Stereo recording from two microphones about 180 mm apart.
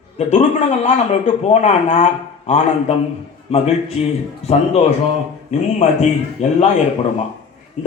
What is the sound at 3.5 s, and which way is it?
A man's voice, 35° left (ahead or behind).